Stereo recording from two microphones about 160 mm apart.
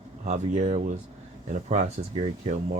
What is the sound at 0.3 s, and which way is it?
Speech, 45° right (ahead or behind).